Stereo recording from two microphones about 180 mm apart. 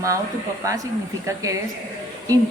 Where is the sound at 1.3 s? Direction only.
15° right (ahead or behind).